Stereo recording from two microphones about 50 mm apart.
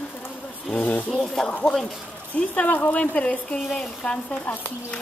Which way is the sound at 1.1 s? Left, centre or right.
Centre.